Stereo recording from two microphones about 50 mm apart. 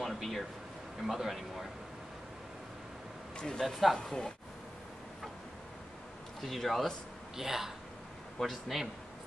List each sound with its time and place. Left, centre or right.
0.0 s a sound: centre
1.0 s speech: centre
3.3 s a man's voice: centre
3.6 s speech: centre
6.4 s speech: centre
7.3 s a man's voice: centre